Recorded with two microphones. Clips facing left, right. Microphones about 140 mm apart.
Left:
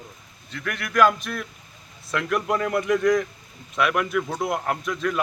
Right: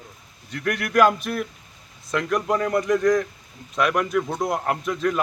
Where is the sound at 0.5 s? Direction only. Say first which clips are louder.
Right 6 dB; 45° right (ahead or behind).